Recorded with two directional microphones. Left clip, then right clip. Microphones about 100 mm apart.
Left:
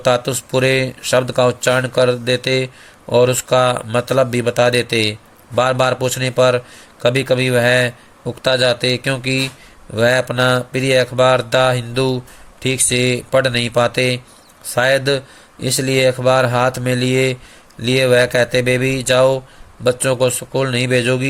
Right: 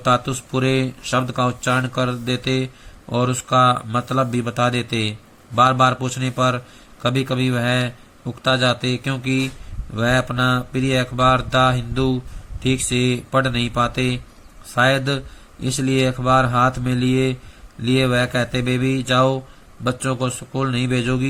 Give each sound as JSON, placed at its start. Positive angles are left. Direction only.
{"t": 0.0, "sound": "speech", "side_deg": 50}